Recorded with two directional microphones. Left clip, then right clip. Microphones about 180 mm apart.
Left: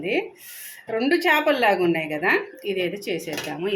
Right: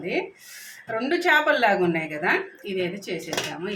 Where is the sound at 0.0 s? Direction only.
25° left (ahead or behind).